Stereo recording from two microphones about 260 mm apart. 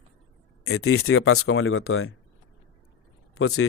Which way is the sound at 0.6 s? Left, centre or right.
Left.